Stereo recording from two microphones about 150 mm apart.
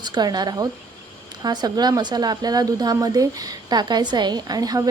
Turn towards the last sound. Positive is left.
turn(degrees=-25)  # may be behind; listen again after turning